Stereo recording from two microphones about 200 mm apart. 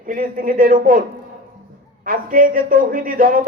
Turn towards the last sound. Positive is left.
turn(degrees=-45)  # may be behind; listen again after turning